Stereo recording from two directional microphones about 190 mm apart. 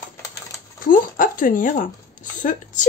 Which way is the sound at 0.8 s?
45° left (ahead or behind).